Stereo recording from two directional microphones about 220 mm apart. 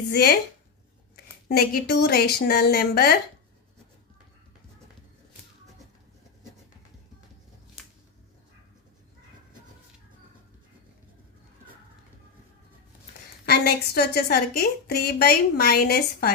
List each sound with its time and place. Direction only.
0.1 s a woman's voice: 45° left (ahead or behind)
13.4 s a woman's voice: 45° left (ahead or behind)